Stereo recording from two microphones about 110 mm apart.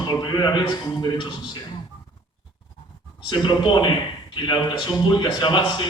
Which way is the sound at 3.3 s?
40° left (ahead or behind).